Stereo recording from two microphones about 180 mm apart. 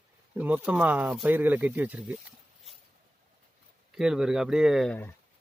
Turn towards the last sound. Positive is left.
turn(degrees=5)  # may be behind; listen again after turning